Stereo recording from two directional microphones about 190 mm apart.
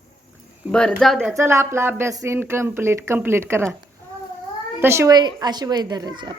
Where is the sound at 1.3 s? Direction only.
15° right (ahead or behind).